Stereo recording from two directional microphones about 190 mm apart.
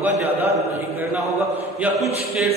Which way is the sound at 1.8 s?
Centre (ahead or behind).